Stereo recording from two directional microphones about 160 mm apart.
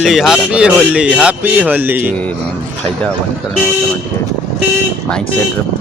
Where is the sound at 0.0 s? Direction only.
Centre (ahead or behind).